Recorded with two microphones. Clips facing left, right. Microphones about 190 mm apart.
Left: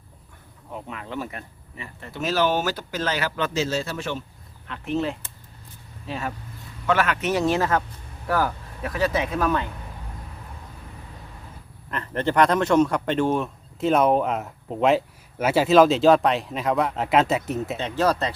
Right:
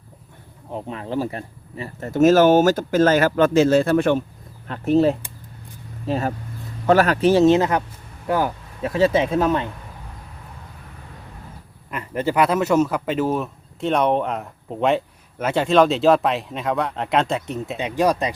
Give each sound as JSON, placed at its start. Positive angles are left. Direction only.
{"t": 0.7, "sound": "speech", "side_deg": -30}
{"t": 4.7, "sound": "speech", "side_deg": -40}
{"t": 11.9, "sound": "speech", "side_deg": -10}
{"t": 17.7, "sound": "speech", "side_deg": -15}